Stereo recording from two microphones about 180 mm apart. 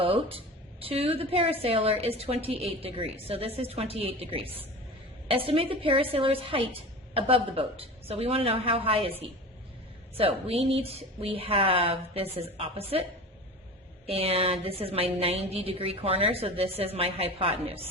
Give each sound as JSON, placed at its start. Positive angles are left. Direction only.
{"t": 0.0, "sound": "a woman's voice", "side_deg": -30}
{"t": 10.2, "sound": "a woman's voice", "side_deg": -35}
{"t": 14.1, "sound": "a woman's voice", "side_deg": -35}